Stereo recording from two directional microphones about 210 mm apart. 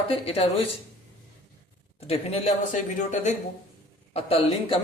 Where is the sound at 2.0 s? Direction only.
30° left (ahead or behind).